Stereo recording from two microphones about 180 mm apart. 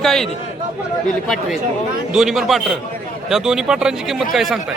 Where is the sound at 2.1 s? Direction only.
Centre (ahead or behind).